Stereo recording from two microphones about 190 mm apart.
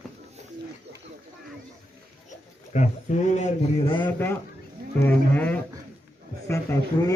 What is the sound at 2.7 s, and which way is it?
A man's voice, 40° left (ahead or behind).